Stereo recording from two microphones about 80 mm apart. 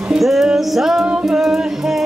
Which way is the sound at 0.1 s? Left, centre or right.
Centre.